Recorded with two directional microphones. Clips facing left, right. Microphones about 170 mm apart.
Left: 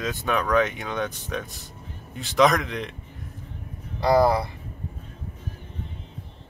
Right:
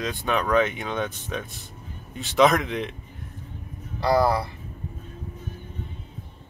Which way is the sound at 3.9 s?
20° left (ahead or behind).